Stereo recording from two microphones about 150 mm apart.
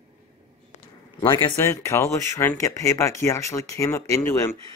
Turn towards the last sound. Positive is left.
turn(degrees=20)  # may be behind; listen again after turning